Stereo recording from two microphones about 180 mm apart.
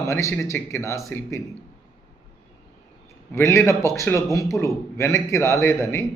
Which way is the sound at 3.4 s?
15° left (ahead or behind).